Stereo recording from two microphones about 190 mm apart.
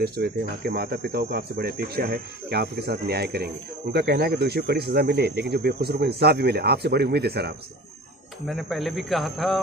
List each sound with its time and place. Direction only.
0.0 s speech: 55° right (ahead or behind)
8.5 s a man's voice: centre (ahead or behind)